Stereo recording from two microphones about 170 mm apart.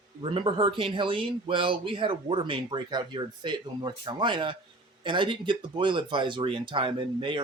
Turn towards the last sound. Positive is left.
turn(degrees=-30)  # may be behind; listen again after turning